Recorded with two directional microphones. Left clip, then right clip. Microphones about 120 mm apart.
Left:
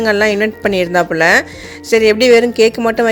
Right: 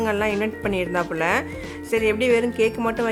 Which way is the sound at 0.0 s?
40° left (ahead or behind).